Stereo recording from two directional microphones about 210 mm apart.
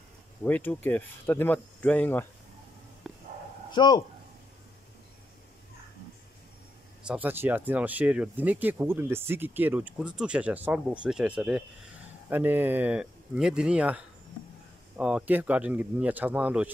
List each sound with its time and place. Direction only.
0.4 s speech: 10° left (ahead or behind)
3.1 s a sound: centre (ahead or behind)
3.7 s speech: 20° left (ahead or behind)
7.1 s speech: 10° right (ahead or behind)